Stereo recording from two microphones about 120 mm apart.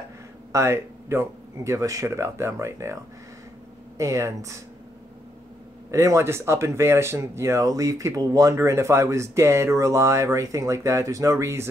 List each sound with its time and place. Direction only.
0.5 s speech: 25° right (ahead or behind)
4.0 s speech: 25° right (ahead or behind)
5.9 s speech: 25° right (ahead or behind)